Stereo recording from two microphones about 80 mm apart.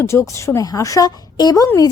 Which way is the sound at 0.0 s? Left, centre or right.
Left.